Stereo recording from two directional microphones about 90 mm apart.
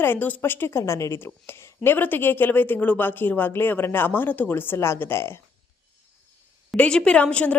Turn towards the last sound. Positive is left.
turn(degrees=15)  # may be behind; listen again after turning